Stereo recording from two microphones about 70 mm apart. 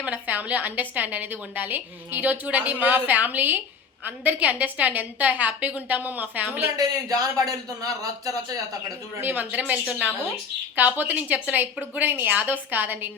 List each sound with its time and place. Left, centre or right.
0.0 s a woman's voice: right
6.7 s speech: right
9.2 s a woman's voice: right